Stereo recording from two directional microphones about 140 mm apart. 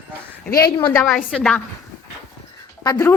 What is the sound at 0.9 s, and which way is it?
Speech, 5° left (ahead or behind).